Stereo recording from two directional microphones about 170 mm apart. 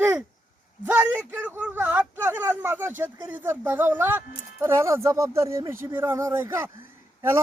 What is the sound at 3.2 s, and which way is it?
A man's voice, 10° right (ahead or behind).